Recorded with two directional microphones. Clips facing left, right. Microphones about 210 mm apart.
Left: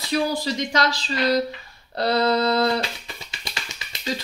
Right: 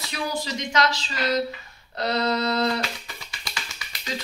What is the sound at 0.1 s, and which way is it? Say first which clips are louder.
A woman's voice: left 7 dB; 35° left (ahead or behind).